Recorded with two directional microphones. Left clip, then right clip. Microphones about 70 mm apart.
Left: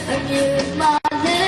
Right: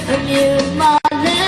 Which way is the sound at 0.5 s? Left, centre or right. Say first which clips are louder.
Right 4 dB; right.